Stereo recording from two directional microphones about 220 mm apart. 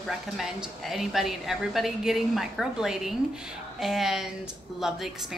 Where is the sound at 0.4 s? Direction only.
Centre (ahead or behind).